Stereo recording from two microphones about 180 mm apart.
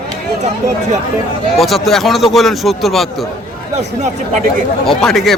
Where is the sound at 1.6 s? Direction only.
Centre (ahead or behind).